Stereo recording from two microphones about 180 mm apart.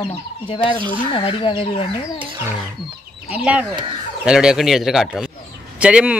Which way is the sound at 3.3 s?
5° right (ahead or behind).